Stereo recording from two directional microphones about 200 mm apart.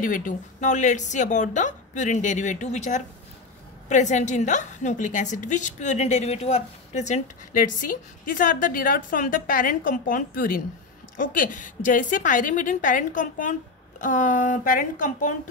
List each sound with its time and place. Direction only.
0.0 s a woman's voice: 40° left (ahead or behind)